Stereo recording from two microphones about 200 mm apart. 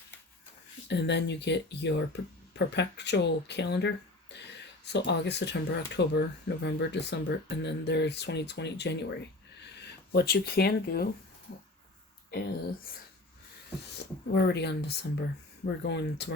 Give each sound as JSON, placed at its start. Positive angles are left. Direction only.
{"t": 0.9, "sound": "speech", "side_deg": 60}
{"t": 12.3, "sound": "speech", "side_deg": 50}
{"t": 14.0, "sound": "speech", "side_deg": 55}